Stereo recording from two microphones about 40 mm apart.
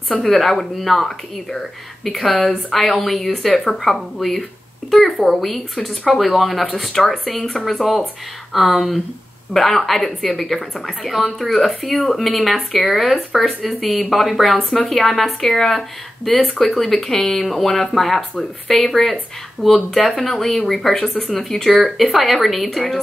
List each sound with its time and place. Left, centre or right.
0.2 s speech: centre
7.8 s speech: centre
8.5 s speech: centre